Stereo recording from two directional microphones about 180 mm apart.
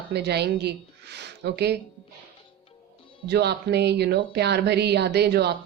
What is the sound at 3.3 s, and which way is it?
Speech, 65° right (ahead or behind).